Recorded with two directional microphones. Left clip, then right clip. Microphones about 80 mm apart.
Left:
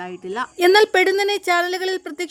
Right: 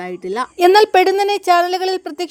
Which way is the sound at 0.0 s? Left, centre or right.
Right.